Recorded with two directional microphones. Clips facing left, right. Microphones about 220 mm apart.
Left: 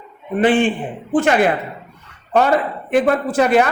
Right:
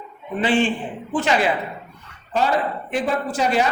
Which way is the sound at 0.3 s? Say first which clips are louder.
Left 5 dB; 55° left (ahead or behind).